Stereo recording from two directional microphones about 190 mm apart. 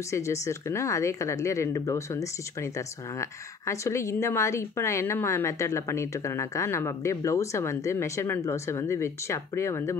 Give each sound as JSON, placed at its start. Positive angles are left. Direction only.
{"t": 0.1, "sound": "speech", "side_deg": 15}